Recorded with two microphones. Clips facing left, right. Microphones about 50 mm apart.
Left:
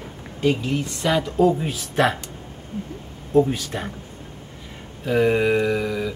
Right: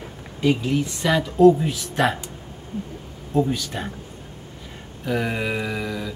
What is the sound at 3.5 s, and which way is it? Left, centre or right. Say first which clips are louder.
Speech: even; left.